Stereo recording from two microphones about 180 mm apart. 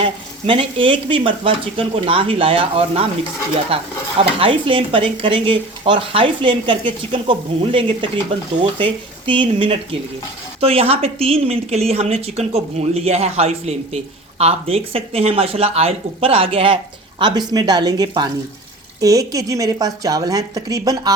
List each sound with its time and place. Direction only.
0.0 s a woman's voice: 30° right (ahead or behind)